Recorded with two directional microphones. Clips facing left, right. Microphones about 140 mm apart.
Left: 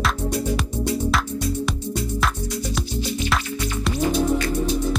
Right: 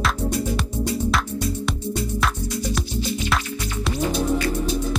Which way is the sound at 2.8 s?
Centre (ahead or behind).